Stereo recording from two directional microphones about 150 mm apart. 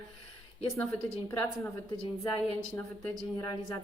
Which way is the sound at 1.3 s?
15° left (ahead or behind).